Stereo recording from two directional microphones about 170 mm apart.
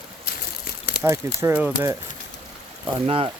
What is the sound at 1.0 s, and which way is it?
Speech, 15° right (ahead or behind).